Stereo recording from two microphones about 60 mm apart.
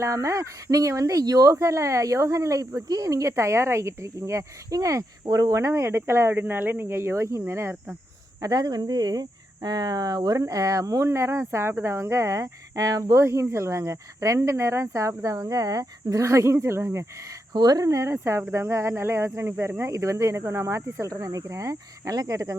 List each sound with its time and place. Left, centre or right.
0.0 s speech: right
1.5 s speech: right
4.7 s speech: right
6.4 s speech: right
8.4 s speech: right
11.1 s speech: right
13.2 s speech: right
17.7 s speech: right